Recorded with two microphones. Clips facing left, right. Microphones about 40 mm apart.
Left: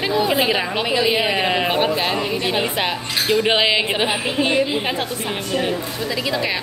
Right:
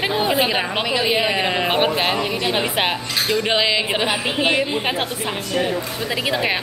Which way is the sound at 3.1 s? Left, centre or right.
Centre.